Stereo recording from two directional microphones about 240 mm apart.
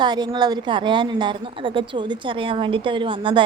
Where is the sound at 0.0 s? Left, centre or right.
Centre.